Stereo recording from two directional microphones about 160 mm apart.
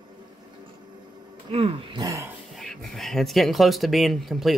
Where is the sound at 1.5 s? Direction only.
35° right (ahead or behind).